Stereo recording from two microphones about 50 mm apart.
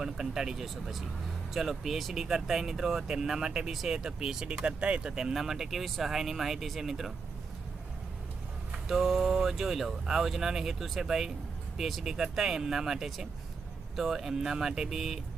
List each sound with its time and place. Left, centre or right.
0.0 s speech: centre
8.9 s speech: centre